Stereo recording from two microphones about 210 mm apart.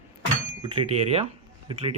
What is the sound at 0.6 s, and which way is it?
Speech, 25° right (ahead or behind).